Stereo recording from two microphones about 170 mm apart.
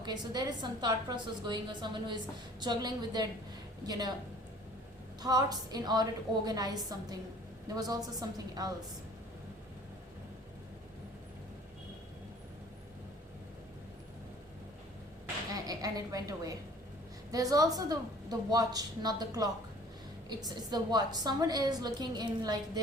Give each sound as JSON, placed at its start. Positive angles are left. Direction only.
{"t": 0.0, "sound": "a woman's voice", "side_deg": -25}
{"t": 5.2, "sound": "a woman's voice", "side_deg": -20}
{"t": 15.5, "sound": "a woman's voice", "side_deg": -20}